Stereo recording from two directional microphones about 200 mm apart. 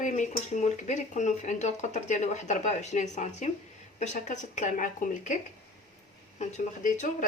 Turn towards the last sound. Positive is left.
turn(degrees=35)  # may be behind; listen again after turning